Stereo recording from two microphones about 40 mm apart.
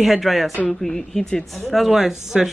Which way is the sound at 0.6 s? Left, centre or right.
Centre.